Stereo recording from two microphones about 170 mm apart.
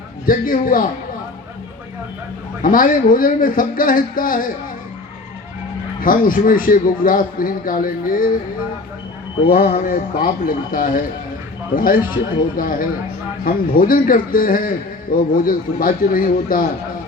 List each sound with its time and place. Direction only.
0.3 s a man's voice: 55° left (ahead or behind)
2.6 s a man's voice: 55° left (ahead or behind)
6.0 s a man's voice: 55° left (ahead or behind)
9.5 s a man's voice: 60° left (ahead or behind)